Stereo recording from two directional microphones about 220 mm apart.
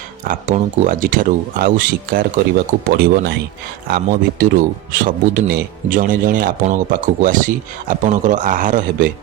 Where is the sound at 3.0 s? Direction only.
50° right (ahead or behind).